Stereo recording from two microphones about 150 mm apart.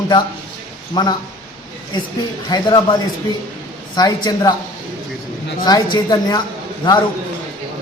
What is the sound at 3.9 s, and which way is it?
Speech, 25° left (ahead or behind).